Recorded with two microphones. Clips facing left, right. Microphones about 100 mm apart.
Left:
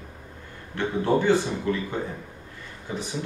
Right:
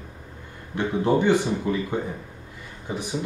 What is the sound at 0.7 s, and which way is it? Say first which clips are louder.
A man's voice: right 1 dB; 15° right (ahead or behind).